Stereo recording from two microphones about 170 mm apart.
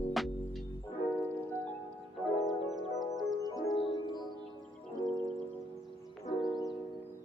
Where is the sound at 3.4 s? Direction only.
20° left (ahead or behind).